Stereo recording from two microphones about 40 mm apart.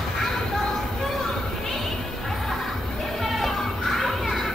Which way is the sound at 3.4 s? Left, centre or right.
Centre.